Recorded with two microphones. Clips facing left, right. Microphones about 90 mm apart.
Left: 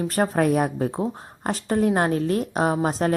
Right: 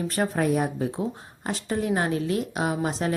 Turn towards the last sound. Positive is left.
turn(degrees=45)  # may be behind; listen again after turning